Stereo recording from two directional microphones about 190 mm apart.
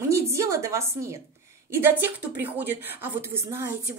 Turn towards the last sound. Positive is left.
turn(degrees=-10)  # may be behind; listen again after turning